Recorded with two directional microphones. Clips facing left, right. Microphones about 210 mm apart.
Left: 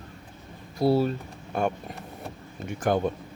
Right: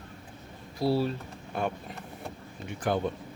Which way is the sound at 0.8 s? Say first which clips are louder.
Left 4 dB; 50° left (ahead or behind).